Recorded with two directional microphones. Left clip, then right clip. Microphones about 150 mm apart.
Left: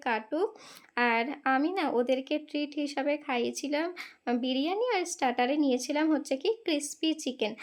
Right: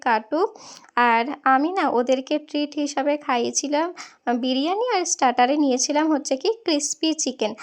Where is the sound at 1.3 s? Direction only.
20° right (ahead or behind).